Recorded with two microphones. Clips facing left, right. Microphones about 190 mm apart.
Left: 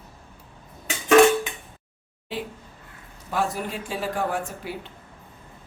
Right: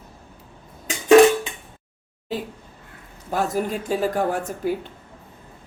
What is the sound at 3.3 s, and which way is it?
Speech, 40° right (ahead or behind).